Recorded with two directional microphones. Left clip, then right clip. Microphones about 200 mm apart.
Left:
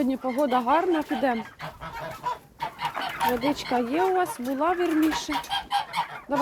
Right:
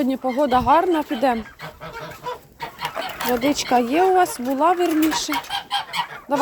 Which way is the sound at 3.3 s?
30° right (ahead or behind).